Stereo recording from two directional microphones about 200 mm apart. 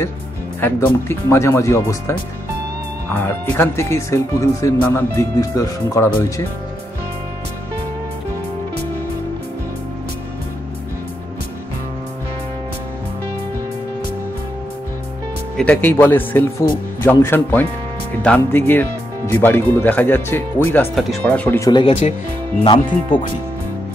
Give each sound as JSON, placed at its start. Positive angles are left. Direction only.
{"t": 0.6, "sound": "speech", "side_deg": 10}
{"t": 15.5, "sound": "speech", "side_deg": 5}
{"t": 23.1, "sound": "speech", "side_deg": 45}